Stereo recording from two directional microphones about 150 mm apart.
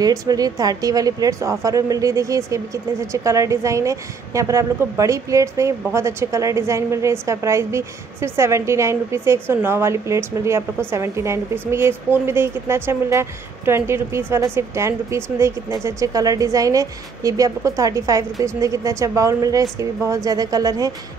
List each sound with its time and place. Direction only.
0.0 s a woman's voice: 25° right (ahead or behind)